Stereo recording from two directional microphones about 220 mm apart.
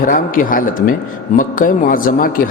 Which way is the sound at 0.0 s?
40° left (ahead or behind).